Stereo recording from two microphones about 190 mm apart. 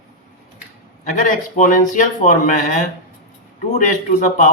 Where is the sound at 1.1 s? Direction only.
40° left (ahead or behind).